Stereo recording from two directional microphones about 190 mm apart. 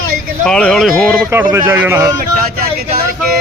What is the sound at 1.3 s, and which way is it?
Speech, 10° right (ahead or behind).